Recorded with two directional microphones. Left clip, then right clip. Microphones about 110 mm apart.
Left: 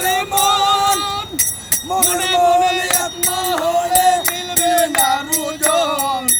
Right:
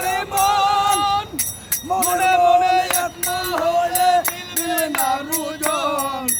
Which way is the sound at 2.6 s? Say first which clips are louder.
Left 1 dB; 30° right (ahead or behind).